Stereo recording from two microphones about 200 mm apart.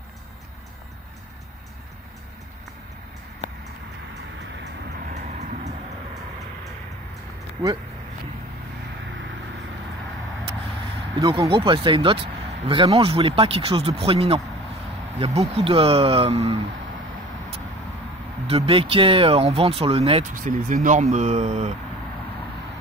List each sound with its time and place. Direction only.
4.9 s vehicle: 45° right (ahead or behind)
11.1 s speech: 20° right (ahead or behind)
18.5 s speech: 25° right (ahead or behind)
20.3 s speech: 40° right (ahead or behind)